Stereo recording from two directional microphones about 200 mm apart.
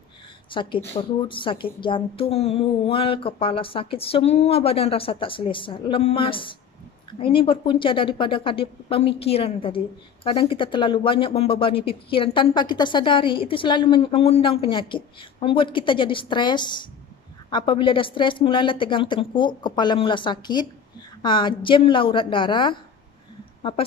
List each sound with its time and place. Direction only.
0.5 s a woman's voice: 25° left (ahead or behind)